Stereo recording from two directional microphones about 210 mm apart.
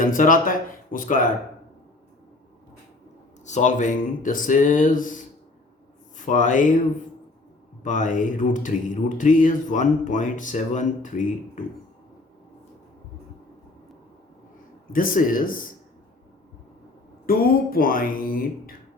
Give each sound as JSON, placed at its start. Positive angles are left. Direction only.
{"t": 0.0, "sound": "speech", "side_deg": 40}
{"t": 3.4, "sound": "speech", "side_deg": 35}
{"t": 7.9, "sound": "speech", "side_deg": 35}
{"t": 14.9, "sound": "speech", "side_deg": 40}
{"t": 17.2, "sound": "speech", "side_deg": 45}